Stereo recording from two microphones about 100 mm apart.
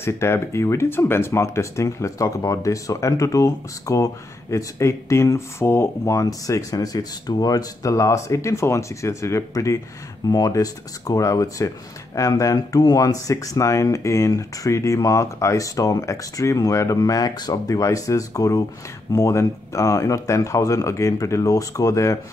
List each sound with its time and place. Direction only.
0.0 s speech: 25° left (ahead or behind)